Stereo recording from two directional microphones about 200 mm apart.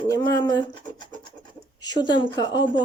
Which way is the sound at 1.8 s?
20° left (ahead or behind).